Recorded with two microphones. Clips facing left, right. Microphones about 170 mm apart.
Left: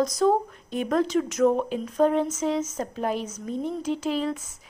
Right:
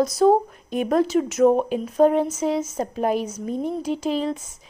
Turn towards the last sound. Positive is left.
turn(degrees=-20)  # may be behind; listen again after turning